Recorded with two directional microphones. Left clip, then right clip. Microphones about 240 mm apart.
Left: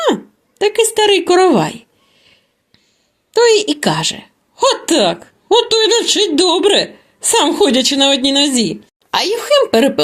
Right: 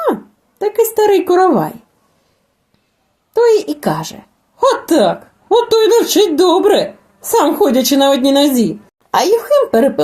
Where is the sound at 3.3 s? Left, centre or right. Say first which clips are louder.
Even; left.